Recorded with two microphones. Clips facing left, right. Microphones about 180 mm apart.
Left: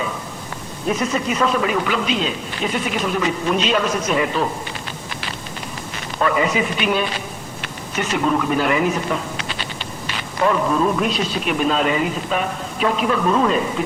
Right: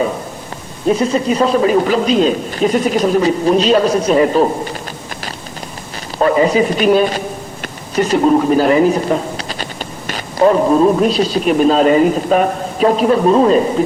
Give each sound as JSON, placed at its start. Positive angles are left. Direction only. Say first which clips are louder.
{"t": 0.9, "sound": "a man's voice", "louder": "right 7 dB", "side_deg": -30}
{"t": 6.1, "sound": "a man's voice", "louder": "right 7 dB", "side_deg": -35}